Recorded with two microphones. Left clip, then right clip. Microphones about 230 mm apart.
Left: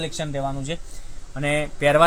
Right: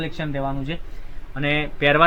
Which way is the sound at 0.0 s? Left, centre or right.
Left.